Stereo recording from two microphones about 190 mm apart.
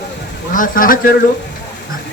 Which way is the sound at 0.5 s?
45° left (ahead or behind).